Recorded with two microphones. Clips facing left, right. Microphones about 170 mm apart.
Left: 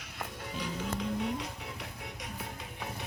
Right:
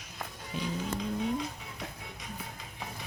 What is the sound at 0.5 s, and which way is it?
Music, 70° left (ahead or behind).